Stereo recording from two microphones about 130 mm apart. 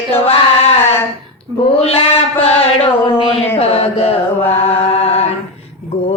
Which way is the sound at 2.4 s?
45° left (ahead or behind).